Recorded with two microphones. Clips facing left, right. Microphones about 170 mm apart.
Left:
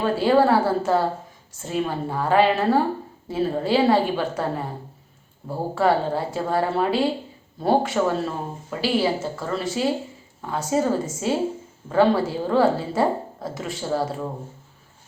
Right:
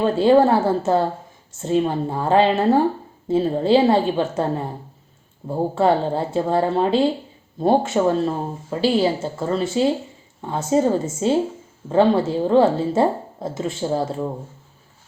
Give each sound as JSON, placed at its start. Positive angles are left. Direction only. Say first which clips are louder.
{"t": 0.2, "sound": "a woman's voice", "louder": "right 3 dB", "side_deg": -25}